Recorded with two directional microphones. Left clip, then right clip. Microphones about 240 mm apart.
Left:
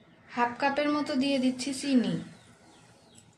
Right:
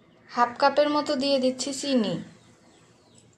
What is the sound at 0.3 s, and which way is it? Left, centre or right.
A woman's voice, right.